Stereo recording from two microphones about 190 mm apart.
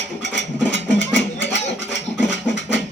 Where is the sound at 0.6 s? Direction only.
70° left (ahead or behind).